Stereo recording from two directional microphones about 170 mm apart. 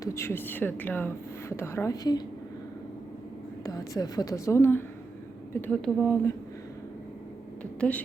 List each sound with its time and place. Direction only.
0.0 s speech: 15° left (ahead or behind)
3.6 s a woman's voice: 20° left (ahead or behind)
7.6 s speech: 10° left (ahead or behind)